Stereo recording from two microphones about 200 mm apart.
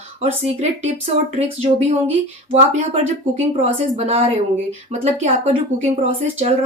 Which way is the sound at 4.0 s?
30° right (ahead or behind).